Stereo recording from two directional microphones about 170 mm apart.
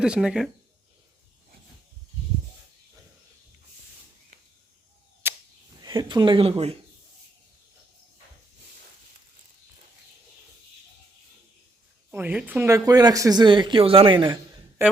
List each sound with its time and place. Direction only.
0.0 s speech: 5° right (ahead or behind)
5.2 s arrow: 15° right (ahead or behind)
5.8 s speech: 25° right (ahead or behind)
12.1 s speech: 10° right (ahead or behind); by 14.3 s 30° right (ahead or behind)